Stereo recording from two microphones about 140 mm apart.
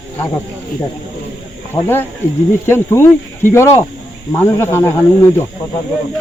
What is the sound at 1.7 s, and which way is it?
Speech, 15° left (ahead or behind).